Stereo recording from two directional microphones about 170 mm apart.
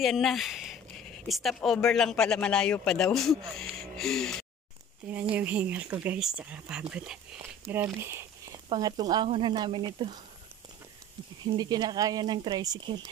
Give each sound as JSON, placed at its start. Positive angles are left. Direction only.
{"t": 0.0, "sound": "speech", "side_deg": 0}
{"t": 3.9, "sound": "music", "side_deg": 0}
{"t": 5.3, "sound": "speech", "side_deg": -10}
{"t": 11.5, "sound": "speech", "side_deg": -25}